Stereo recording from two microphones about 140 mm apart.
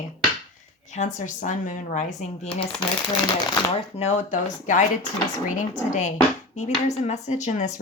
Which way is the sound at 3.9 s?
55° left (ahead or behind).